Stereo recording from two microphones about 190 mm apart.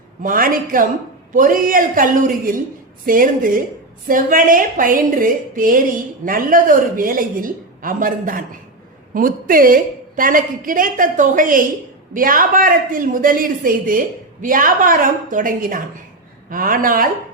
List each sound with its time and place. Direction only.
0.2 s a woman's voice: 45° right (ahead or behind)